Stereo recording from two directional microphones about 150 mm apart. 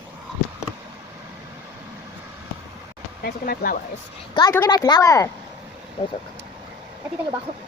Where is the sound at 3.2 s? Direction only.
80° left.